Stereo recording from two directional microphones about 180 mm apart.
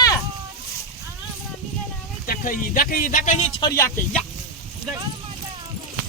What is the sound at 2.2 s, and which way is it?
Speech, 50° left (ahead or behind).